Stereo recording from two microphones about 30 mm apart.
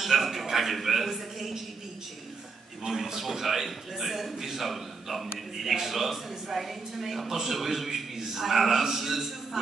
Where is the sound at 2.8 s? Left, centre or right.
Centre.